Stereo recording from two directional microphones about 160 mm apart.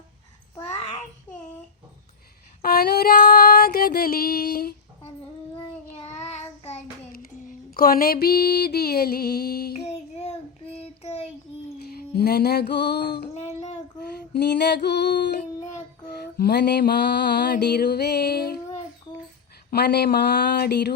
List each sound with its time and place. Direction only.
2.6 s female singing: 75° left (ahead or behind)
6.3 s child singing: 40° left (ahead or behind)
7.1 s female singing: 65° left (ahead or behind)
9.8 s child singing: 40° left (ahead or behind)
11.9 s music: 80° left
14.0 s female singing: 75° left (ahead or behind); by 15.4 s 90° left
16.2 s mantra: 85° left
19.7 s mantra: 90° left